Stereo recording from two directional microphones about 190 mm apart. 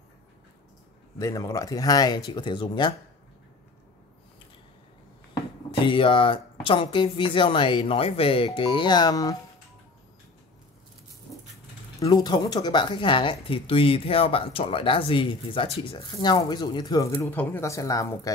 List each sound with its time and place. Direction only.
1.1 s speech: 15° left (ahead or behind)
5.7 s speech: 25° left (ahead or behind)
12.0 s speech: 20° left (ahead or behind)